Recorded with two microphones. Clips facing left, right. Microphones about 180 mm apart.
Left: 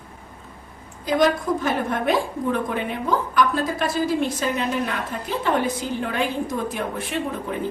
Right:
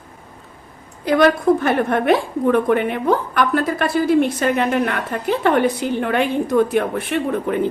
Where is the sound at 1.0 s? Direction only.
65° right (ahead or behind).